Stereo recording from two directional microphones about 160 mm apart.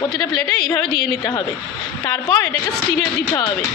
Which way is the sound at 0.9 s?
80° left.